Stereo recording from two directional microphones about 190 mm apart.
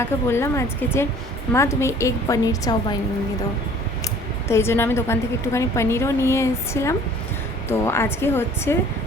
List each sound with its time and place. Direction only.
0.0 s a woman's voice: 15° left (ahead or behind)
4.4 s a woman's voice: 15° left (ahead or behind)